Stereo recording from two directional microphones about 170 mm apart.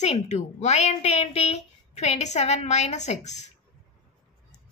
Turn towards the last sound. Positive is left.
turn(degrees=45)  # may be behind; listen again after turning